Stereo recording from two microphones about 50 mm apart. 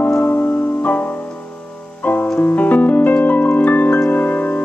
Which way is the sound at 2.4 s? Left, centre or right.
Left.